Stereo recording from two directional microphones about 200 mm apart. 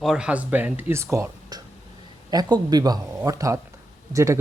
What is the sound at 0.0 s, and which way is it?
Speech, 5° right (ahead or behind).